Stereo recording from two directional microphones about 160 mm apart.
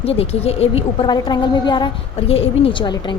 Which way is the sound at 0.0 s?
40° left (ahead or behind).